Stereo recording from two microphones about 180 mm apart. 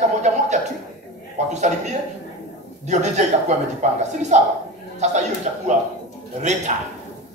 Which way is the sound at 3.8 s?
40° right (ahead or behind).